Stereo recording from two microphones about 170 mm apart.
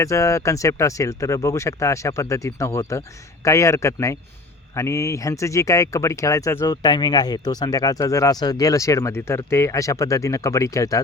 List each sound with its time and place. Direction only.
0.0 s speech: 20° left (ahead or behind)